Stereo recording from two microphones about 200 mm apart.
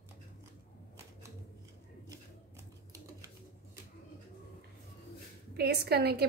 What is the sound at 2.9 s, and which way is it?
Typewriter, 15° right (ahead or behind).